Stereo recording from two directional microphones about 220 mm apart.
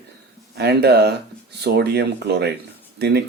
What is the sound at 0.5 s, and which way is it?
Speech, 50° right (ahead or behind).